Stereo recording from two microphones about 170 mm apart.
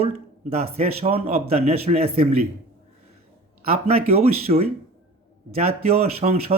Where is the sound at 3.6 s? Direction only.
35° right (ahead or behind).